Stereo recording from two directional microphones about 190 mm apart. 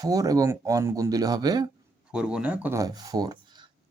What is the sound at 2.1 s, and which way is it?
Speech, 5° right (ahead or behind).